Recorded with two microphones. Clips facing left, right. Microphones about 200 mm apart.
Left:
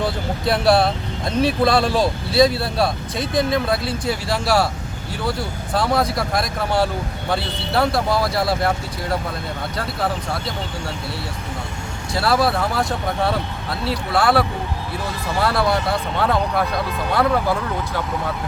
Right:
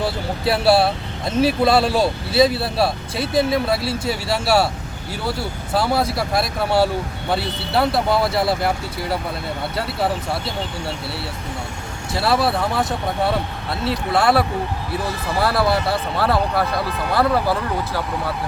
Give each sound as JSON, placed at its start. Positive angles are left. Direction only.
{"t": 0.0, "sound": "speech", "side_deg": -5}
{"t": 12.1, "sound": "speech", "side_deg": 0}
{"t": 14.1, "sound": "speech", "side_deg": -25}
{"t": 15.4, "sound": "speech", "side_deg": -5}